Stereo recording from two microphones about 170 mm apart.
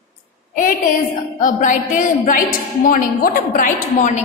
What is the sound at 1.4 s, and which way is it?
A woman's voice, 50° left (ahead or behind).